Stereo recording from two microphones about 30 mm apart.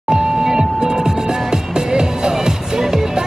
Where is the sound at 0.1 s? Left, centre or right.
Right.